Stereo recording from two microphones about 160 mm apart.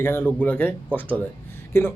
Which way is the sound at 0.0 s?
15° left (ahead or behind).